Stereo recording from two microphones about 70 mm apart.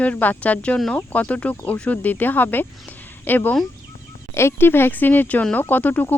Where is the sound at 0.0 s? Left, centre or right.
Left.